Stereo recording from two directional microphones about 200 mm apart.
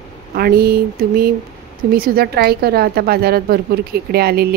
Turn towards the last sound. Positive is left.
turn(degrees=-50)  # may be behind; listen again after turning